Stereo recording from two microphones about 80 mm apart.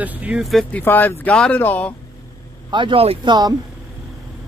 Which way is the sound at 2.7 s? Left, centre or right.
Right.